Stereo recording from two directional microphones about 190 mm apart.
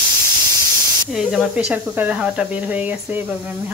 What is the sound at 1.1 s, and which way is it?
Speech, 5° right (ahead or behind).